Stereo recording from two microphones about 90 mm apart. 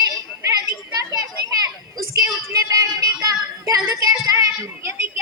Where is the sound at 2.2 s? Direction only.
45° right (ahead or behind).